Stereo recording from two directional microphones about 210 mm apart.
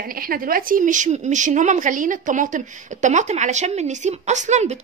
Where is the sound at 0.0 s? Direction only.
45° right (ahead or behind).